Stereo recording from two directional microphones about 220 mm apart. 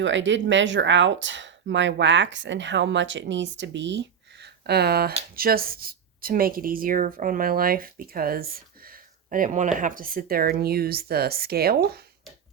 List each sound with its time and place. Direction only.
0.0 s speech: 55° right (ahead or behind)